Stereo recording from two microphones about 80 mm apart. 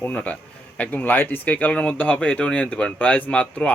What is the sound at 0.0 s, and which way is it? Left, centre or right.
A man's voice, centre.